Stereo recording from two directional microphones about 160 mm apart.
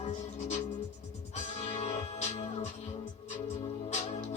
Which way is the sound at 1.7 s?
45° left (ahead or behind).